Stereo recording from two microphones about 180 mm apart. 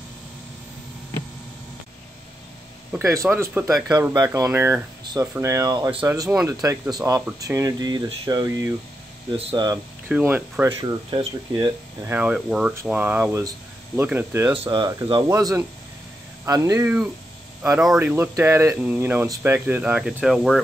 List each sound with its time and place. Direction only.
2.9 s speech: 15° right (ahead or behind)
5.0 s speech: 20° right (ahead or behind)
9.4 s speech: 35° right (ahead or behind)
10.0 s speech: 10° right (ahead or behind)
10.7 s speech: 30° right (ahead or behind)
12.1 s speech: 10° right (ahead or behind)
14.5 s speech: 30° right (ahead or behind)
17.9 s speech: 10° right (ahead or behind)